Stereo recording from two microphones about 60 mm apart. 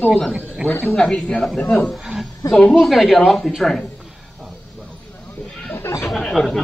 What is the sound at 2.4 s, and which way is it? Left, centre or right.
Speech, left.